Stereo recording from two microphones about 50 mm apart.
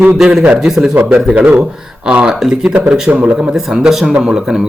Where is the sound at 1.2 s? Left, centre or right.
Right; by 4.7 s centre.